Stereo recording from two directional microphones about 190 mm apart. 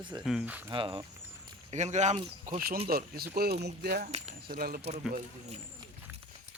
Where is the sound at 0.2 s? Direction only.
5° right (ahead or behind).